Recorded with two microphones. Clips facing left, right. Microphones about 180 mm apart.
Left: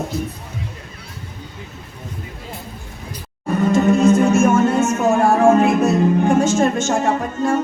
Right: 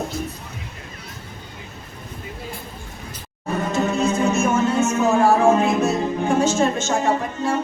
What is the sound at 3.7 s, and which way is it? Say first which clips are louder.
Music: left 8 dB; 50° left (ahead or behind).